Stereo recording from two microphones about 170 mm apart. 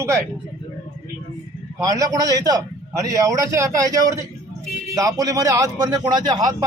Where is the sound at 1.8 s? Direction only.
20° right (ahead or behind).